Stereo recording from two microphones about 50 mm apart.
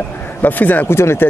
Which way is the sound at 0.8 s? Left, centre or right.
Left.